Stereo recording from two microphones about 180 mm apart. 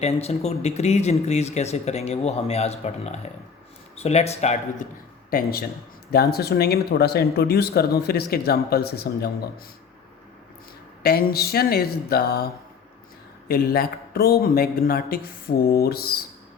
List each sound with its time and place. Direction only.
0.0 s speech: 35° left (ahead or behind)
5.3 s speech: 55° left (ahead or behind)
11.0 s speech: 60° left (ahead or behind)
13.5 s speech: 55° left (ahead or behind)